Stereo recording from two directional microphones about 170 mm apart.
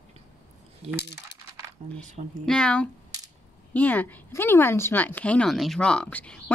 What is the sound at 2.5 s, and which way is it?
Speech, 5° left (ahead or behind).